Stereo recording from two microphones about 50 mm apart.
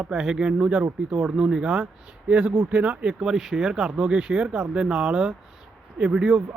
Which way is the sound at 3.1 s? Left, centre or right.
Centre.